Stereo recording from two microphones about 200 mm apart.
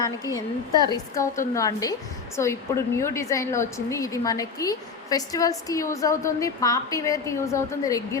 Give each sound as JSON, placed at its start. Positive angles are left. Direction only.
{"t": 0.0, "sound": "a woman's voice", "side_deg": 15}